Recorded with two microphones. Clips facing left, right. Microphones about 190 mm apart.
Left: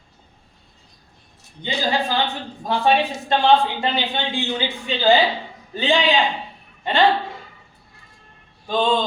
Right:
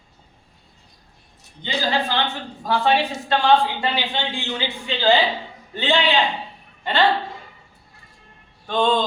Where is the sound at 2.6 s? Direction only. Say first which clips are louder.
Left 1 dB; 20° left (ahead or behind).